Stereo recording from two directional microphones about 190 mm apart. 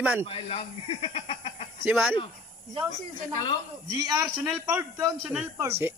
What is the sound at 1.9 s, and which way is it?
Speech, 5° right (ahead or behind).